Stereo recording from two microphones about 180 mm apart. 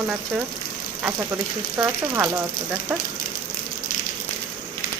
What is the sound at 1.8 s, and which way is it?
Speech, 15° right (ahead or behind).